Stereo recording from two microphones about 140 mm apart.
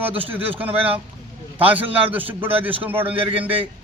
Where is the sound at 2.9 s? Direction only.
40° right (ahead or behind).